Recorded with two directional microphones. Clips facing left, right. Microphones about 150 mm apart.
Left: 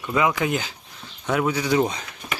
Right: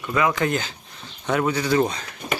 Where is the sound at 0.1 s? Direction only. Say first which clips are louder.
Even; 15° left (ahead or behind).